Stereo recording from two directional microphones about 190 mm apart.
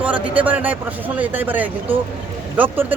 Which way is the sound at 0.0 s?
10° right (ahead or behind).